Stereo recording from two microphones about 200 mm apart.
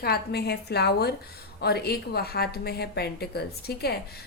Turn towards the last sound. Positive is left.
turn(degrees=50)  # may be behind; listen again after turning